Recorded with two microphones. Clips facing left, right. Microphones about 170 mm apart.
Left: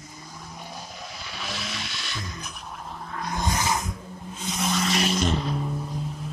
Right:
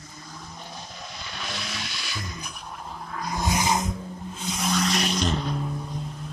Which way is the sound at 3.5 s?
15° right (ahead or behind).